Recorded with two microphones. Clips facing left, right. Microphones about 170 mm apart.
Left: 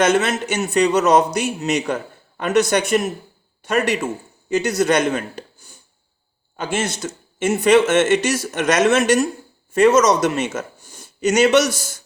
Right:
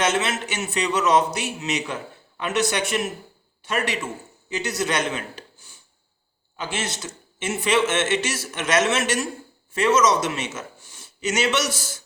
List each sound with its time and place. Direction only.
0.0 s a man's voice: 45° left (ahead or behind)